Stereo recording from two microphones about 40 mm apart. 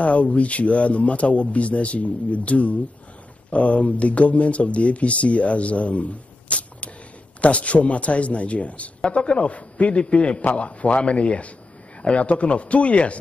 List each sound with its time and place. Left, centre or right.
0.0 s speech: left